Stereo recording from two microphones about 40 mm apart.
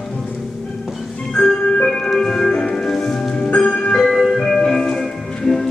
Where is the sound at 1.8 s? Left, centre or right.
Centre.